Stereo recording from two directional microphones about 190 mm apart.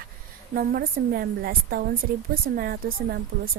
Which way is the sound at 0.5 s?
50° right (ahead or behind).